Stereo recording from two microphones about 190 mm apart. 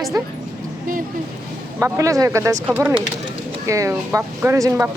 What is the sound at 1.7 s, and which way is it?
Speech, 15° right (ahead or behind).